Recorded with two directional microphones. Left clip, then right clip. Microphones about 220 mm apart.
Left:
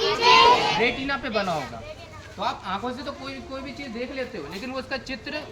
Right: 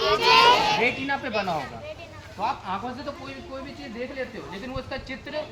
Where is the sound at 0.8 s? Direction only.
50° left (ahead or behind).